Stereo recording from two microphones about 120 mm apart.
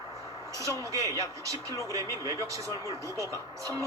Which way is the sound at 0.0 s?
30° right (ahead or behind).